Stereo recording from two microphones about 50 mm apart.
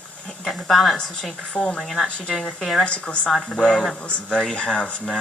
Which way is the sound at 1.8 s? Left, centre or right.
Centre.